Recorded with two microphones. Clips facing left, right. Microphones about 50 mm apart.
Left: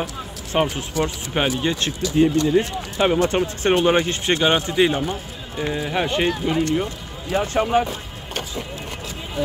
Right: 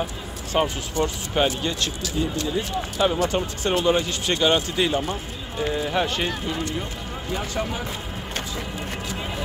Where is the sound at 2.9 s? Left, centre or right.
Left.